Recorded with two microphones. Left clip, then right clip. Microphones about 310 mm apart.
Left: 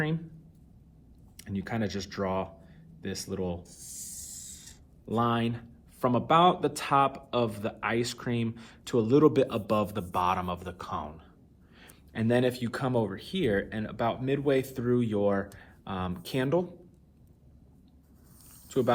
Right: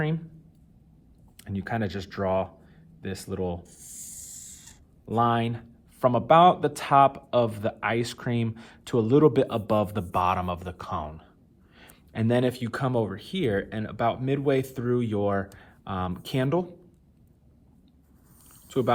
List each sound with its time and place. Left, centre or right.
1.4 s speech: right
5.0 s speech: right